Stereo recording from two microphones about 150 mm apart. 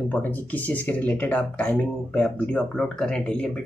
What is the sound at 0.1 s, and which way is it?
Speech, 10° left (ahead or behind).